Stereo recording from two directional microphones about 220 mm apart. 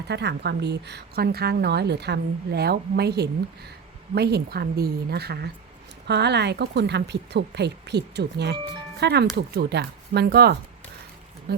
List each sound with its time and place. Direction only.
0.1 s a woman's voice: 50° right (ahead or behind)